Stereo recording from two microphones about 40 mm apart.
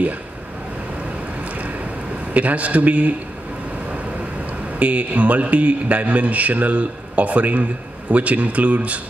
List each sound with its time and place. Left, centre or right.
1.4 s boat: right
2.3 s a man's voice: right
4.7 s a man's voice: right